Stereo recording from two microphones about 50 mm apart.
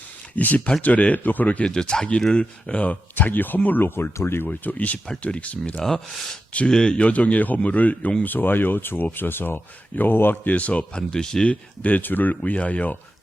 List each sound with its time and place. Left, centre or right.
0.3 s speech: left
1.7 s speech: centre
2.8 s speech: left
4.4 s speech: left
10.5 s speech: left
11.1 s speech: centre
11.4 s speech: left
12.4 s speech: left